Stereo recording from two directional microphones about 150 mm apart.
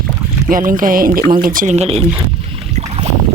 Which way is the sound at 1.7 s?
45° right (ahead or behind).